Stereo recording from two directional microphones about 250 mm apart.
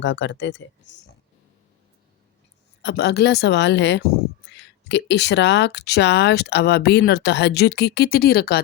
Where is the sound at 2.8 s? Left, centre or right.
Left.